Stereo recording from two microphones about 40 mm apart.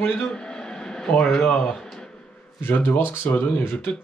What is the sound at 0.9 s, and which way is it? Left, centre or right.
Speech, centre.